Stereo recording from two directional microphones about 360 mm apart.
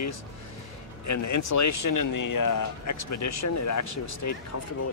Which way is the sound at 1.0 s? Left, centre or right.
Left.